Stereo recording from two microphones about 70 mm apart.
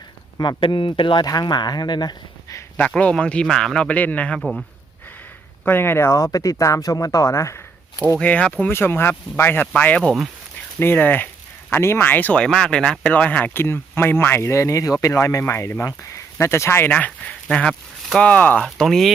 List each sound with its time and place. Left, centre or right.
0.3 s speech: left
1.2 s speech: left
2.7 s speech: centre
3.4 s speech: centre; by 4.4 s left
4.4 s speech: centre
5.6 s speech: left
6.1 s speech: left
8.2 s speech: centre
8.7 s speech: left
11.7 s speech: left
11.9 s speech: left
12.4 s speech: centre; by 16.9 s left
16.9 s speech: centre
18.6 s speech: centre